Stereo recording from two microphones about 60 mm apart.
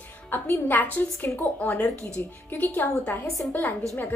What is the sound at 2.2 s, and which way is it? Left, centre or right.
Speech, left.